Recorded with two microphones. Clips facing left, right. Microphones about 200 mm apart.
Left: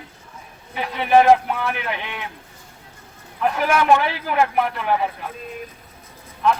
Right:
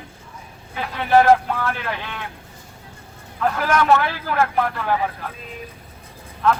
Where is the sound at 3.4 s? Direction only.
15° left (ahead or behind).